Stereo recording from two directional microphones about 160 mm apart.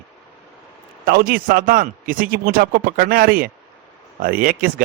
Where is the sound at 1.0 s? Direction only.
65° right (ahead or behind).